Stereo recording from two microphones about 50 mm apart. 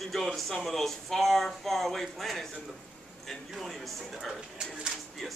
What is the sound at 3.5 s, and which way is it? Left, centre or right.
Speech, centre.